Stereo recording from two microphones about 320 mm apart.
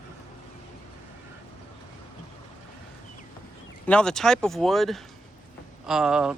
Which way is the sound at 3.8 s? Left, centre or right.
Centre.